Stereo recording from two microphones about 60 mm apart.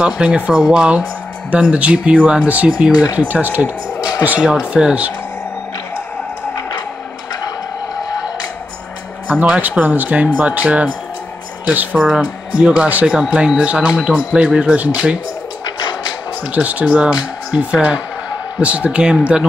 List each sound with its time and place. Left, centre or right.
0.0 s speech: centre
2.9 s speech: left
3.2 s speech: right
7.4 s vehicle: left
9.3 s speech: right
16.5 s speech: right